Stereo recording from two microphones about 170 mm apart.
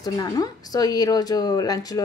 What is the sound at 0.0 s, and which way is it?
A woman's voice, 20° left (ahead or behind).